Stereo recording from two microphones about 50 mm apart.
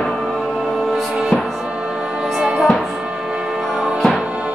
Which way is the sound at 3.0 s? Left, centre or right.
Centre.